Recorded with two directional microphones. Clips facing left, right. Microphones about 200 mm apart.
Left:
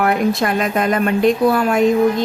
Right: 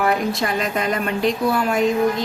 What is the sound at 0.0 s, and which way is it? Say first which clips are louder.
A woman's voice: left 4 dB; 55° left (ahead or behind).